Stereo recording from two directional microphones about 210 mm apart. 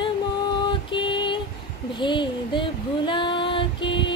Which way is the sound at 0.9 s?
25° left (ahead or behind).